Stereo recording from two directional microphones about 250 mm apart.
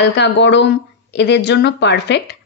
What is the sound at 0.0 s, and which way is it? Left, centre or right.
Speech, left.